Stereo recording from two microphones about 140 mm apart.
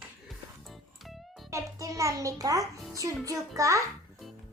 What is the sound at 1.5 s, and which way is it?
A child's voice, 20° right (ahead or behind).